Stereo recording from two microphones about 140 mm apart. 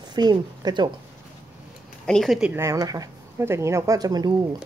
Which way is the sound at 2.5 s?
20° right (ahead or behind).